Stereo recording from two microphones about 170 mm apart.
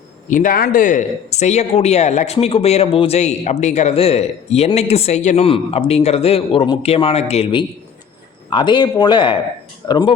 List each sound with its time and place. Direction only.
0.3 s a man's voice: 50° left (ahead or behind); by 10.2 s 25° left (ahead or behind)